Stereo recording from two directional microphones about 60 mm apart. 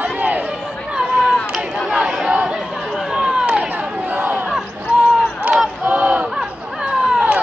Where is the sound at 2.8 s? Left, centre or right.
Centre.